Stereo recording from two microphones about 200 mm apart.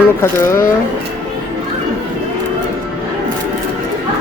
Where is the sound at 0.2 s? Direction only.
15° left (ahead or behind).